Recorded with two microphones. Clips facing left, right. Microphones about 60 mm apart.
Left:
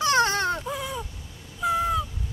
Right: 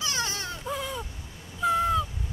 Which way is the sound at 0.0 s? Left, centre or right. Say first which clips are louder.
Left 10 dB; left.